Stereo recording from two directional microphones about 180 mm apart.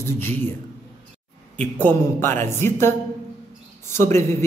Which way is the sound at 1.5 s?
10° left (ahead or behind).